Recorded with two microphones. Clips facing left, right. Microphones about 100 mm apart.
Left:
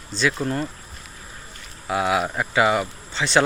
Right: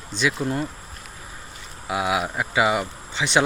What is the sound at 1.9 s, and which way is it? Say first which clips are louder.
Speech: left 2 dB; 10° right (ahead or behind).